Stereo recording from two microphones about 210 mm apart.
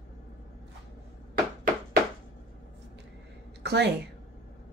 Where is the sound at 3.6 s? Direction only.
55° right (ahead or behind).